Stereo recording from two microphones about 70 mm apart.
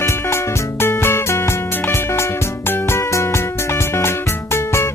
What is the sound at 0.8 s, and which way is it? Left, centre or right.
Music, left.